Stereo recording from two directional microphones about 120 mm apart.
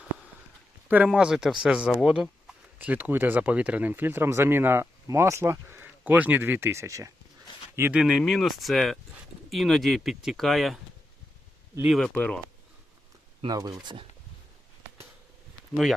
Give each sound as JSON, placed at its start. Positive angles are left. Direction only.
{"t": 0.9, "sound": "speech", "side_deg": -10}
{"t": 2.7, "sound": "speech", "side_deg": -15}
{"t": 7.9, "sound": "speech", "side_deg": -5}
{"t": 11.9, "sound": "speech", "side_deg": 5}
{"t": 13.5, "sound": "speech", "side_deg": -30}